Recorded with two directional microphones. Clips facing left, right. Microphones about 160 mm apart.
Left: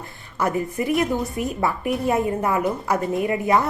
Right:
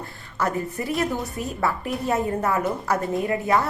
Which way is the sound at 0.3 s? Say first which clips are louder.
Left 3 dB; 15° left (ahead or behind).